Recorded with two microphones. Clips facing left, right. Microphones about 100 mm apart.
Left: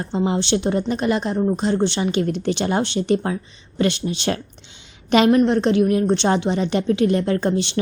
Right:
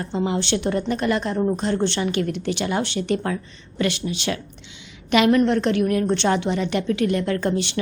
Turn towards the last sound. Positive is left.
turn(degrees=25)  # may be behind; listen again after turning